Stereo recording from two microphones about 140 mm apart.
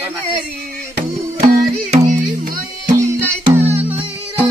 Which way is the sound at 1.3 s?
45° right (ahead or behind).